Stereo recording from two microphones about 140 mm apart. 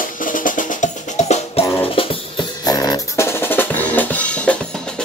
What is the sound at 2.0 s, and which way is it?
Music, 40° left (ahead or behind).